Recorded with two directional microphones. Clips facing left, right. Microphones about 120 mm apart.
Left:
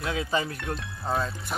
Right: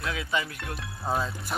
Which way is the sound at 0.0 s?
30° left (ahead or behind).